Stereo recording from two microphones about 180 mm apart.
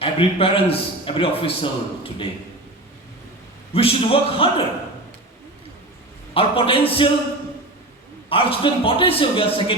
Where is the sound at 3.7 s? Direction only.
30° left (ahead or behind).